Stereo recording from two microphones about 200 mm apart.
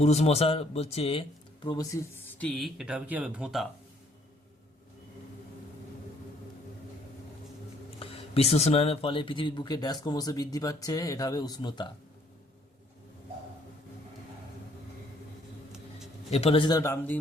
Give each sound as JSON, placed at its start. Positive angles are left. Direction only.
{"t": 0.0, "sound": "speech", "side_deg": 30}
{"t": 1.6, "sound": "speech", "side_deg": 20}
{"t": 7.9, "sound": "speech", "side_deg": 30}
{"t": 16.3, "sound": "speech", "side_deg": 30}